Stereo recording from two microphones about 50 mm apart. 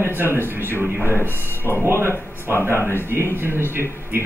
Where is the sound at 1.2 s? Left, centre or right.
Left.